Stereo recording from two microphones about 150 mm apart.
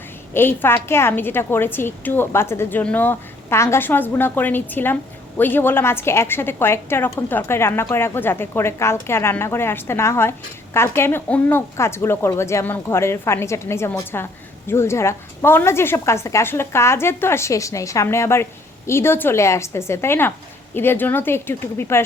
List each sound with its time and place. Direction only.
0.3 s a woman's voice: 15° left (ahead or behind)